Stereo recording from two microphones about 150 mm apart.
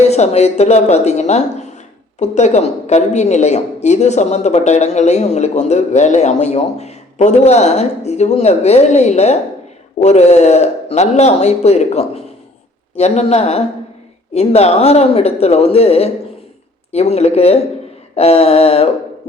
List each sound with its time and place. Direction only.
0.1 s a woman's voice: 45° left (ahead or behind)